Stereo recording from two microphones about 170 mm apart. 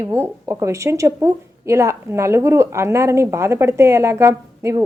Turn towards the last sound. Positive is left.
turn(degrees=-15)  # may be behind; listen again after turning